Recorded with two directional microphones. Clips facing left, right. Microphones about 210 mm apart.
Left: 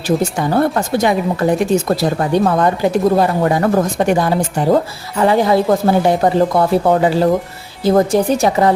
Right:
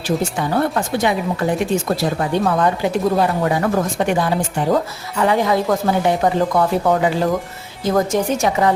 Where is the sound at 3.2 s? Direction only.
40° left (ahead or behind).